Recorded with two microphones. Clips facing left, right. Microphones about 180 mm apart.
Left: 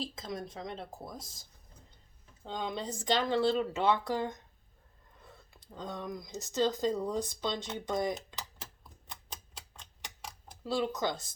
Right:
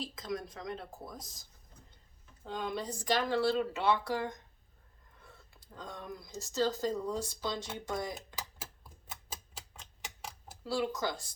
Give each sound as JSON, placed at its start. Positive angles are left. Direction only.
{"t": 0.0, "sound": "speech", "side_deg": 25}
{"t": 2.4, "sound": "speech", "side_deg": 25}
{"t": 5.5, "sound": "speech", "side_deg": 20}
{"t": 9.0, "sound": "tick-tock", "side_deg": -5}
{"t": 10.6, "sound": "speech", "side_deg": 20}